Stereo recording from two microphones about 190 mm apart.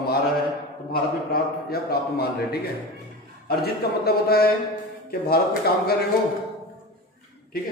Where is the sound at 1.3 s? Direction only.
55° left (ahead or behind).